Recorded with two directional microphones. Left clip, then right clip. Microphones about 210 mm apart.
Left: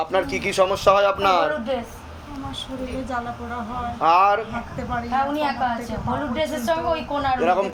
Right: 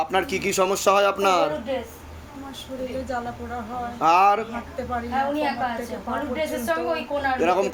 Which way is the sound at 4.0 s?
45° right (ahead or behind).